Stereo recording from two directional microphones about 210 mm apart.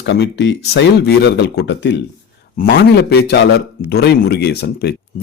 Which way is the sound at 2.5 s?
45° left (ahead or behind).